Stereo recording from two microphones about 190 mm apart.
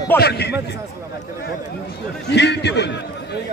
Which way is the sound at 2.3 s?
65° left (ahead or behind).